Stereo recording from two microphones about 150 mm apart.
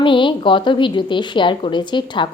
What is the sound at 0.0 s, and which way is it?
A woman's voice, 35° left (ahead or behind).